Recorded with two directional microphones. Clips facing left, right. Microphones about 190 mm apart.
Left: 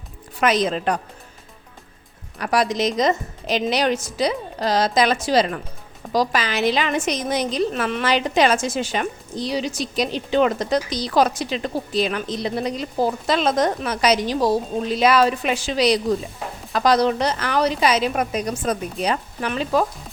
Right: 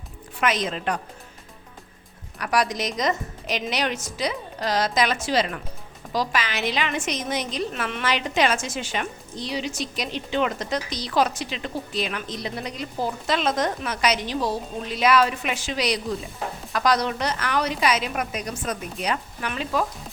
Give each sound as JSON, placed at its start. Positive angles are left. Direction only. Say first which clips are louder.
{"t": 0.3, "sound": "a woman's voice", "louder": "left 5 dB", "side_deg": 35}
{"t": 2.4, "sound": "a woman's voice", "louder": "left 4 dB", "side_deg": 30}